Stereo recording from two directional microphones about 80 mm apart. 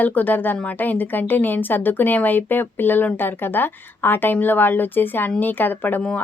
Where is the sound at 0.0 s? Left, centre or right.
Left.